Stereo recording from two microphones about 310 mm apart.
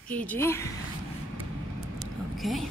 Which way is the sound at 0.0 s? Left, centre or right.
Centre.